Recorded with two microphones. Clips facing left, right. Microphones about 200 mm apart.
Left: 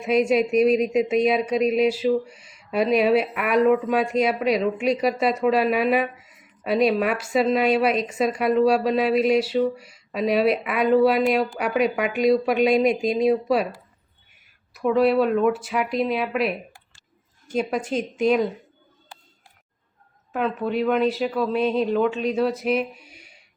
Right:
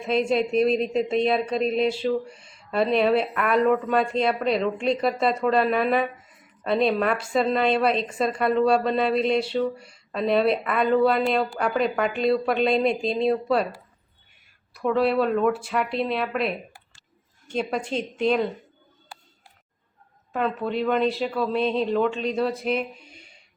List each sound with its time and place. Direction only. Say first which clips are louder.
0.0 s speech: left 3 dB; 10° left (ahead or behind)
14.7 s speech: left 3 dB; 5° left (ahead or behind)
20.3 s speech: left 2 dB; 5° left (ahead or behind)